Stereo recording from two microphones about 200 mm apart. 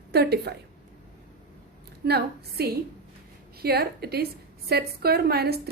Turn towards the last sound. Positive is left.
turn(degrees=-50)  # may be behind; listen again after turning